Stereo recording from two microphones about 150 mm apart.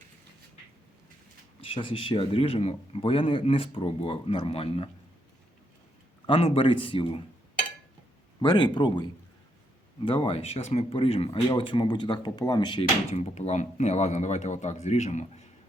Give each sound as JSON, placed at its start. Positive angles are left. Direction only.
{"t": 1.6, "sound": "speech", "side_deg": 35}
{"t": 6.2, "sound": "speech", "side_deg": 40}
{"t": 8.4, "sound": "speech", "side_deg": 30}
{"t": 13.1, "sound": "speech", "side_deg": 45}